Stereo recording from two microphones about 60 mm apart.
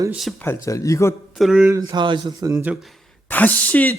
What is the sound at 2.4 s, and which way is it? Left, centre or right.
Speech, right.